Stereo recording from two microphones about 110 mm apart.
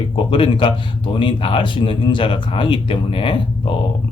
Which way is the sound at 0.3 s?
50° left (ahead or behind).